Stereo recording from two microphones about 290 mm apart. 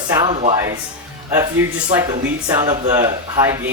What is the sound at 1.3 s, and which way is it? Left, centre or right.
Speech, centre.